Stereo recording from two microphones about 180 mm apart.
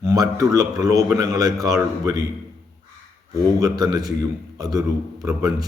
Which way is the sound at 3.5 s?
20° right (ahead or behind).